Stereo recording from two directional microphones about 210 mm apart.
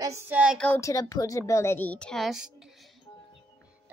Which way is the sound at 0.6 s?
10° left (ahead or behind).